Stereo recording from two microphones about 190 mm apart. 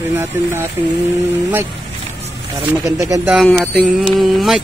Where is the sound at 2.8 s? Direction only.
15° right (ahead or behind).